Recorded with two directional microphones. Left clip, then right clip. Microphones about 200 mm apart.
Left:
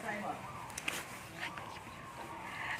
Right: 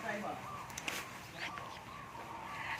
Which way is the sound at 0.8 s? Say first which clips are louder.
Left 3 dB; 5° left (ahead or behind).